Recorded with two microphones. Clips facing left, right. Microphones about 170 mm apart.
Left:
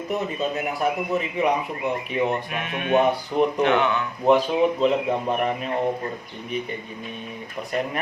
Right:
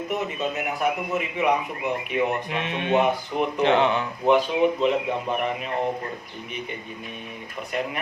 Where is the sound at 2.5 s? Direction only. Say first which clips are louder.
Left 1 dB; 25° right (ahead or behind).